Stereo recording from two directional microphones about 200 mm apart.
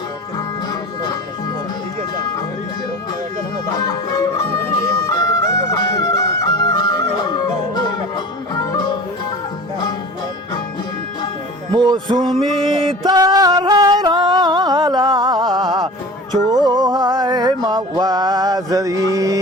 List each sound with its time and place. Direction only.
3.7 s music: 20° left (ahead or behind)
11.7 s music: 20° right (ahead or behind)